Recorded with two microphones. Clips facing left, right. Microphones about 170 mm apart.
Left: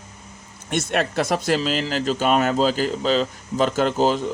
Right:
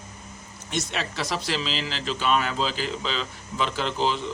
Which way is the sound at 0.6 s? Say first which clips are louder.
Left 7 dB; 55° left (ahead or behind).